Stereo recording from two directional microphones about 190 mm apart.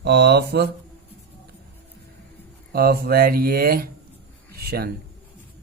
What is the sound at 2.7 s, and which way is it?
Speech, 55° right (ahead or behind).